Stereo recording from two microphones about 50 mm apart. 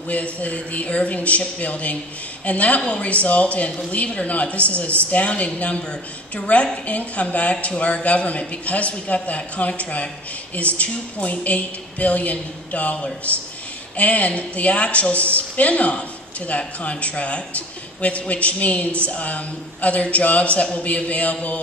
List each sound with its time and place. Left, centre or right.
0.1 s speech: left